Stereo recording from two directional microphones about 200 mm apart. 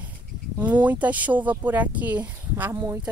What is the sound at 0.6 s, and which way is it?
Speech, 5° right (ahead or behind).